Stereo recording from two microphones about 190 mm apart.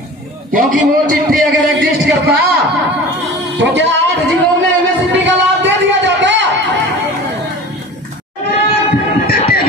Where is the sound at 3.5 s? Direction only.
70° right (ahead or behind).